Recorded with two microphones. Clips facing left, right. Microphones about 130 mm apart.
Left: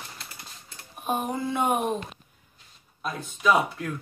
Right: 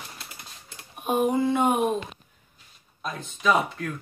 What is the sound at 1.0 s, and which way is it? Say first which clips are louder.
Speech: right 5 dB; 5° left (ahead or behind).